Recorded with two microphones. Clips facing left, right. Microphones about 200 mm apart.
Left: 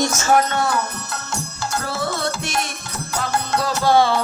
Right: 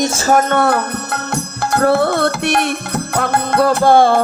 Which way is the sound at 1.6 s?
60° right (ahead or behind).